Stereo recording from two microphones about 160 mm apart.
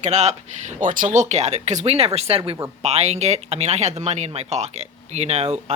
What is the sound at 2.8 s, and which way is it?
Speech, 45° right (ahead or behind).